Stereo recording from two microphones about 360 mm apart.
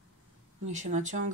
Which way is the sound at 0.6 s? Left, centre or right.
Centre.